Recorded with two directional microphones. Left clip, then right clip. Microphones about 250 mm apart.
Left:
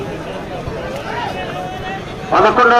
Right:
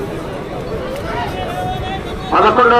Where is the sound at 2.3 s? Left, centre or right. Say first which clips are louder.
Even; left.